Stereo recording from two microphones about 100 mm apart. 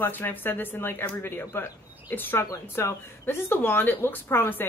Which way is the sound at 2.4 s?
30° left (ahead or behind).